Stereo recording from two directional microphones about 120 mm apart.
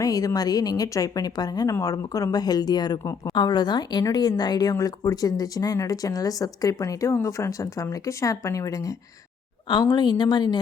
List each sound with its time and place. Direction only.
0.0 s a woman's voice: 30° left (ahead or behind)